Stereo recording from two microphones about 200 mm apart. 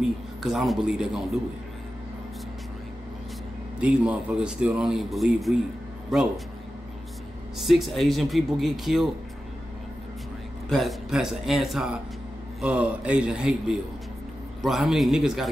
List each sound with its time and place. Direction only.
0.0 s a man's voice: centre (ahead or behind)
3.8 s a man's voice: 5° right (ahead or behind)
7.5 s a man's voice: centre (ahead or behind)
10.7 s a man's voice: centre (ahead or behind)